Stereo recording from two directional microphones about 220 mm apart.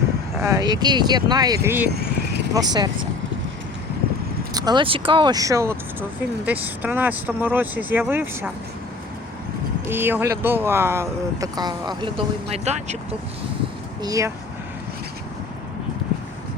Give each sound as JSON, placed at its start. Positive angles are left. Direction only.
{"t": 0.4, "sound": "speech", "side_deg": -15}
{"t": 1.9, "sound": "a sound", "side_deg": -45}
{"t": 2.5, "sound": "speech", "side_deg": -15}
{"t": 4.5, "sound": "speech", "side_deg": -20}
{"t": 9.9, "sound": "speech", "side_deg": -10}
{"t": 14.0, "sound": "speech", "side_deg": -15}